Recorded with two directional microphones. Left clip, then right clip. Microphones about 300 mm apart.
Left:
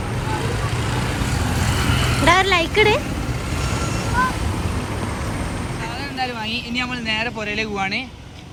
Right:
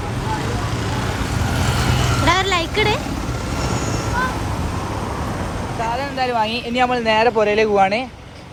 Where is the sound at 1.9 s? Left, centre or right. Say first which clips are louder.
Right 1 dB; right.